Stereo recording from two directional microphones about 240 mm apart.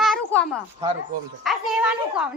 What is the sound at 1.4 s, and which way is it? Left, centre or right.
Speech, centre.